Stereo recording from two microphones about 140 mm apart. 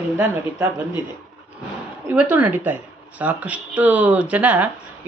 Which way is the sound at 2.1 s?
10° right (ahead or behind).